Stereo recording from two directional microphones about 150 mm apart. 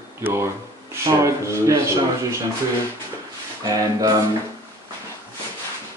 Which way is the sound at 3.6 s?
25° right (ahead or behind).